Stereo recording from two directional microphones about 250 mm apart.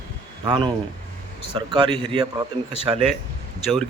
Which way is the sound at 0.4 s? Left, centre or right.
Centre.